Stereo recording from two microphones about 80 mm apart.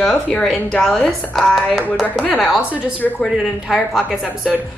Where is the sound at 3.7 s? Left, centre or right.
Centre.